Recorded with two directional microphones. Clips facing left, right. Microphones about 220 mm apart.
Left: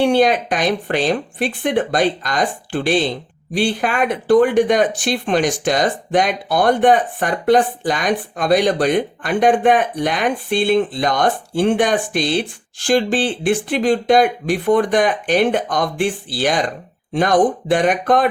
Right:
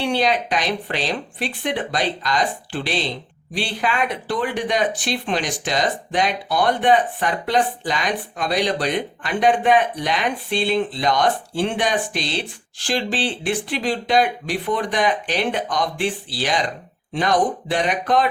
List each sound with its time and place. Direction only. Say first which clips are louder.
0.0 s speech: left 6 dB; 50° left (ahead or behind)